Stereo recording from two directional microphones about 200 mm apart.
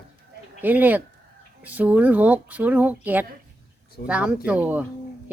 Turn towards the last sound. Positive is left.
turn(degrees=-10)  # may be behind; listen again after turning